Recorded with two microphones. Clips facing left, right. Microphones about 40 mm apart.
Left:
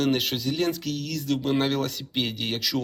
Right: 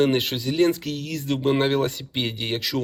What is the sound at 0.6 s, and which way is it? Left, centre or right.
Speech, right.